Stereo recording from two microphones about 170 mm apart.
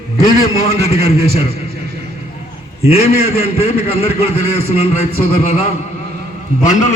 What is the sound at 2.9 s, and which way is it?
A man's voice, 35° left (ahead or behind).